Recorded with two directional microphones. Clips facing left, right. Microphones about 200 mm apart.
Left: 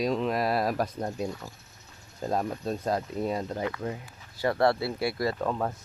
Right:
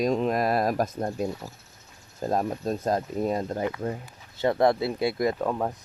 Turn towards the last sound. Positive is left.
turn(degrees=-10)  # may be behind; listen again after turning